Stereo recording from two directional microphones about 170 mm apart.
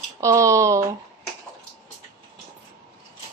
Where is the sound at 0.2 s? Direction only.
20° right (ahead or behind).